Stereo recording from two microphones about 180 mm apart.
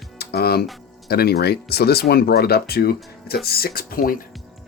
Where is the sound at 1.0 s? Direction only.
60° left (ahead or behind).